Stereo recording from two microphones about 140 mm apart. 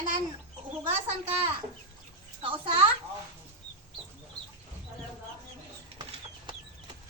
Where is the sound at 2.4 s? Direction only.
40° right (ahead or behind).